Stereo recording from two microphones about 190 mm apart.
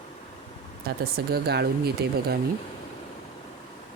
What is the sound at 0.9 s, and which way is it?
Speech, 55° right (ahead or behind).